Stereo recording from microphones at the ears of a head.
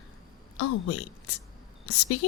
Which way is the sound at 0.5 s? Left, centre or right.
Left.